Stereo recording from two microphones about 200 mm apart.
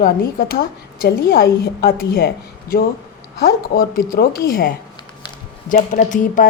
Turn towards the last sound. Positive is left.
turn(degrees=40)  # may be behind; listen again after turning